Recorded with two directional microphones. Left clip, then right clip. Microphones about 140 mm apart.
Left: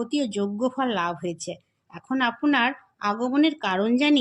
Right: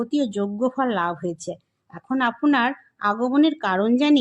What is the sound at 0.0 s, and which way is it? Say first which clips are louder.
A woman's voice: right 2 dB; 35° right (ahead or behind).